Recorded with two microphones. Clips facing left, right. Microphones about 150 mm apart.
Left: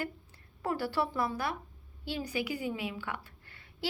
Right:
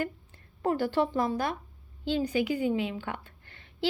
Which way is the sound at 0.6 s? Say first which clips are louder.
Right 5 dB; 25° right (ahead or behind).